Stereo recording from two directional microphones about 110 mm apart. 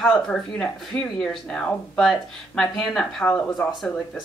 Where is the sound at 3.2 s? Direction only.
15° left (ahead or behind).